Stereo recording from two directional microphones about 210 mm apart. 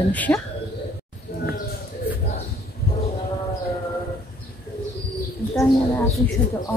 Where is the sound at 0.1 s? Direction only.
5° left (ahead or behind).